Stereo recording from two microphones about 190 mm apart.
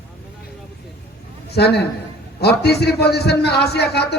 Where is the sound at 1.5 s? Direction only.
60° left (ahead or behind).